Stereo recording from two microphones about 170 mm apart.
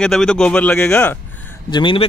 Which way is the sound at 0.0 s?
5° left (ahead or behind).